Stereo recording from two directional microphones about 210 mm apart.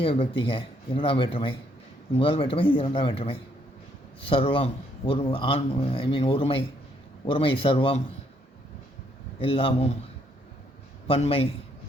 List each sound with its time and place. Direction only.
0.0 s a man's voice: 25° left (ahead or behind)
9.4 s a man's voice: 25° left (ahead or behind)
11.1 s a man's voice: 30° left (ahead or behind)